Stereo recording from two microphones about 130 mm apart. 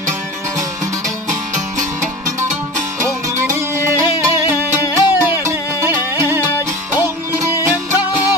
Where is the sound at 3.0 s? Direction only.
20° right (ahead or behind).